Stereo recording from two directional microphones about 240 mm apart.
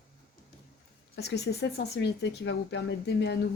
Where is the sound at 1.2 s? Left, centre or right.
Left.